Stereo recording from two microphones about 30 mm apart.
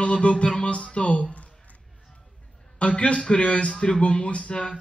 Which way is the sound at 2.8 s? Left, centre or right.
Left.